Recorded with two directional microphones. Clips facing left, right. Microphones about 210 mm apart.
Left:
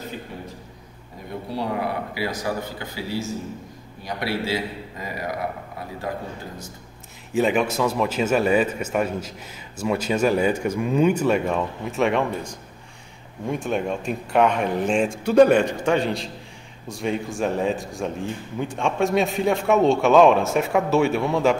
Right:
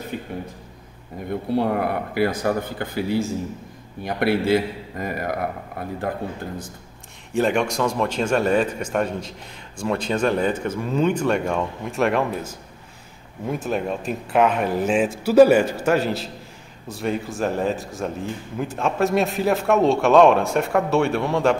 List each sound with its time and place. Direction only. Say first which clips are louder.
0.1 s a sound: right 4 dB; 55° right (ahead or behind)
1.5 s a man's voice: right 5 dB; 55° right (ahead or behind)
7.3 s a man's voice: even; centre (ahead or behind)